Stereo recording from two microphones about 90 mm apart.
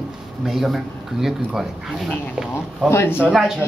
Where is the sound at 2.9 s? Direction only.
25° left (ahead or behind).